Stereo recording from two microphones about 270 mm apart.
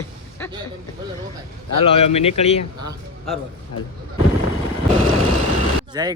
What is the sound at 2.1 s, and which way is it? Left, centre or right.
Speech, left.